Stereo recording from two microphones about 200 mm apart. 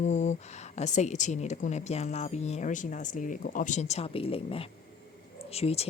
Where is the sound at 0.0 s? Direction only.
35° left (ahead or behind).